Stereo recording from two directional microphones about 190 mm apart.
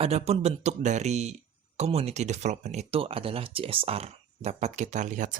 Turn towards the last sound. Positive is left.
turn(degrees=-40)  # may be behind; listen again after turning